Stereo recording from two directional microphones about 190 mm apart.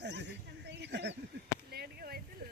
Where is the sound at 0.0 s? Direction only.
65° right (ahead or behind).